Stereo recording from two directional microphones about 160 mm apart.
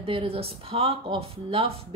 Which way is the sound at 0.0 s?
35° right (ahead or behind).